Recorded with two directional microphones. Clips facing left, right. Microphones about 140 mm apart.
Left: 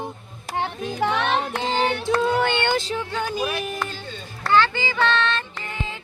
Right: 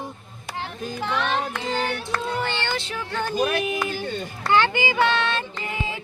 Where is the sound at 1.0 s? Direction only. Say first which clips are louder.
Left 3 dB; 65° left (ahead or behind).